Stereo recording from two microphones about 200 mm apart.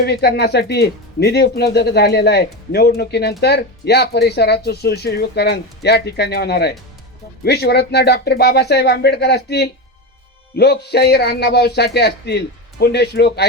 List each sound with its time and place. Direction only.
0.0 s speech: 55° left (ahead or behind)